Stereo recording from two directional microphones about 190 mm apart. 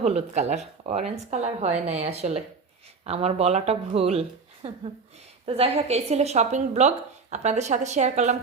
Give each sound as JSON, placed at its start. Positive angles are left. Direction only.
{"t": 0.0, "sound": "a woman's voice", "side_deg": -35}